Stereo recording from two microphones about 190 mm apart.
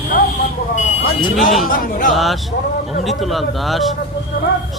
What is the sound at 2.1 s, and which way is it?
A man's voice, centre (ahead or behind).